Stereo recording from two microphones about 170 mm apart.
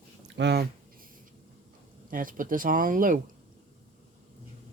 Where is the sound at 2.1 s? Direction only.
55° right (ahead or behind).